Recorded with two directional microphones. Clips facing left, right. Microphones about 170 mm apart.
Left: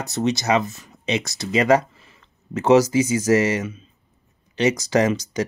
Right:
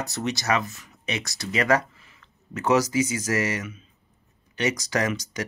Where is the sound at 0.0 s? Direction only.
25° left (ahead or behind).